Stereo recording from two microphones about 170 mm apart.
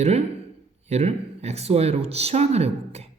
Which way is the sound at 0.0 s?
40° right (ahead or behind).